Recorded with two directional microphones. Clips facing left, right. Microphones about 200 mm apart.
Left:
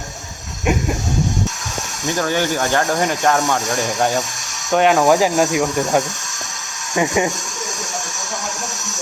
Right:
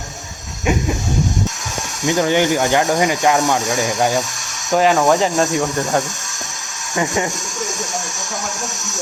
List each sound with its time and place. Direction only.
0.6 s speech: centre (ahead or behind)
2.0 s speech: 20° right (ahead or behind); by 7.3 s 15° left (ahead or behind)